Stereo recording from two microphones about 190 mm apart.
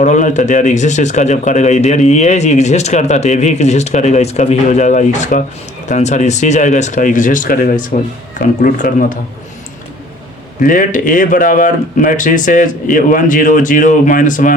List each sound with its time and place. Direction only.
0.0 s speech: 40° left (ahead or behind)
10.6 s speech: 45° left (ahead or behind)